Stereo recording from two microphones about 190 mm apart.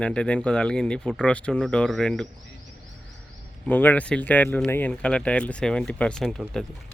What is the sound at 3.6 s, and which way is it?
Speech, 10° left (ahead or behind).